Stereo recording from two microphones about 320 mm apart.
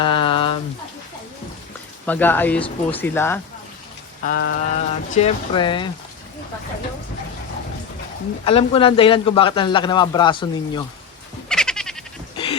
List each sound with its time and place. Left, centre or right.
0.0 s a sound: centre
2.0 s speech: centre
4.2 s mantra: left
4.8 s a man's voice: left
8.4 s a man's voice: centre
11.4 s frog: centre